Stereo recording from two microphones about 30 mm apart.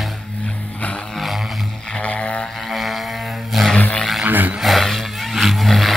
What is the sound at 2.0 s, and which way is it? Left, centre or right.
Vehicle, left.